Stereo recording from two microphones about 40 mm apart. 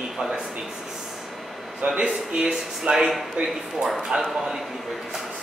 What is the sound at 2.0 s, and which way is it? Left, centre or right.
Speech, right.